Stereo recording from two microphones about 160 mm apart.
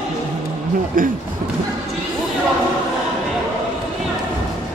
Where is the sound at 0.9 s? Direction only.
60° right (ahead or behind).